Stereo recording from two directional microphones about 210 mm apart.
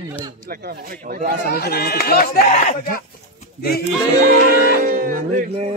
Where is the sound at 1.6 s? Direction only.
50° left (ahead or behind).